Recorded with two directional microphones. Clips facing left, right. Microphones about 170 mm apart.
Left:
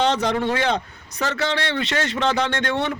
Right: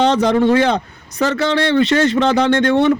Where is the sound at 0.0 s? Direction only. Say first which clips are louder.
Right 7 dB; 35° right (ahead or behind).